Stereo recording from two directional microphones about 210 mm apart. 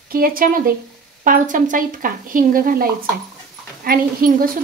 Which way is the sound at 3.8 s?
45° right (ahead or behind).